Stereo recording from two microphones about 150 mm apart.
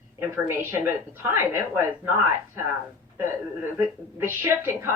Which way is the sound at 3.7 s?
15° right (ahead or behind).